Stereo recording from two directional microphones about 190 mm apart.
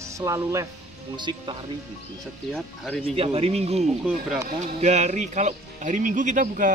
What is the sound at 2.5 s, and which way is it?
Speech, centre (ahead or behind).